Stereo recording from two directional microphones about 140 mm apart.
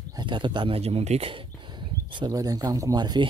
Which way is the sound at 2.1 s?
30° right (ahead or behind).